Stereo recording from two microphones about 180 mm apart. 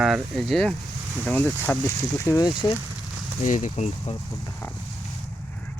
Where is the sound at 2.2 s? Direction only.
20° left (ahead or behind).